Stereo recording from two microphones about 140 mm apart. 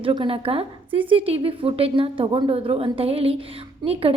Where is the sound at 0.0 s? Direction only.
40° right (ahead or behind).